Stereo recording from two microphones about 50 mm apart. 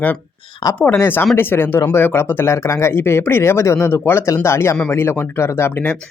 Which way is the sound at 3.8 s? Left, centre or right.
Left.